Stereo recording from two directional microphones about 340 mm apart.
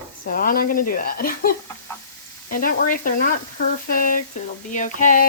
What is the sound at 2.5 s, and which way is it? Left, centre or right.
Speech, left.